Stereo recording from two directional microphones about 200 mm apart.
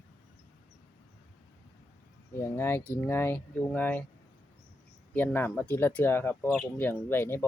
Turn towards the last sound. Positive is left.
turn(degrees=10)  # may be behind; listen again after turning